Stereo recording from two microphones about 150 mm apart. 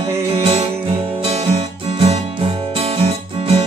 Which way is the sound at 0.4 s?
45° right (ahead or behind).